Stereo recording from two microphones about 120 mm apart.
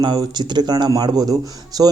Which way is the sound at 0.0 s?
40° right (ahead or behind).